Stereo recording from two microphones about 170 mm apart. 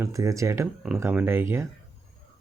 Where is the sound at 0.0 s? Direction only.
20° right (ahead or behind).